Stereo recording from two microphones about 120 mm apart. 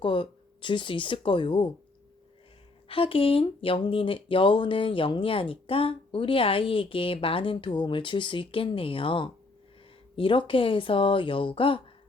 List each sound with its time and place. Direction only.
0.0 s speech: 45° left (ahead or behind)
2.9 s speech: 50° left (ahead or behind)